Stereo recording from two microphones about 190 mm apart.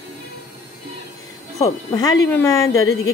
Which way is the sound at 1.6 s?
15° left (ahead or behind).